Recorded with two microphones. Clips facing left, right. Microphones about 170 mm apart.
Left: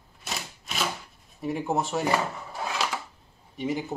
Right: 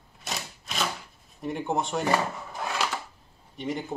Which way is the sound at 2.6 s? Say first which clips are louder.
Even; centre (ahead or behind).